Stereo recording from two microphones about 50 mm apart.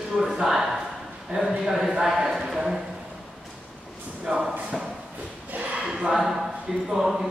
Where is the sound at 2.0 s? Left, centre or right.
Centre.